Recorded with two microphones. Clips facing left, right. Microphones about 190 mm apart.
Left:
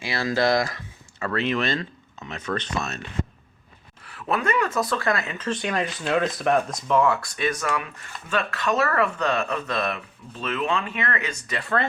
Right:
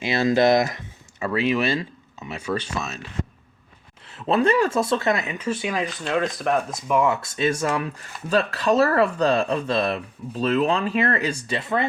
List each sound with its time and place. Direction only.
0.0 s speech: 20° right (ahead or behind); by 3.1 s centre (ahead or behind)
4.0 s speech: 25° right (ahead or behind); by 6.9 s centre (ahead or behind)
6.9 s speech: 20° right (ahead or behind)